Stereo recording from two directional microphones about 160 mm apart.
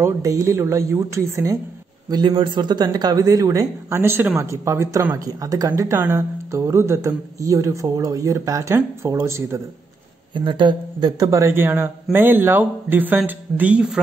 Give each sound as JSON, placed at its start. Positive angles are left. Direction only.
{"t": 0.0, "sound": "speech", "side_deg": -20}
{"t": 10.3, "sound": "speech", "side_deg": -30}